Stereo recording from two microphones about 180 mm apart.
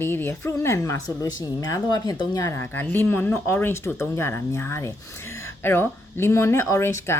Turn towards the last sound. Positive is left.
turn(degrees=15)  # may be behind; listen again after turning